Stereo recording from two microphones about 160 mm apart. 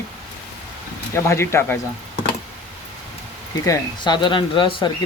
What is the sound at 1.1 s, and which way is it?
Speech, 15° left (ahead or behind).